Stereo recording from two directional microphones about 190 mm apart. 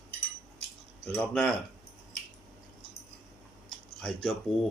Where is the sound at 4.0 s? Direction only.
5° left (ahead or behind).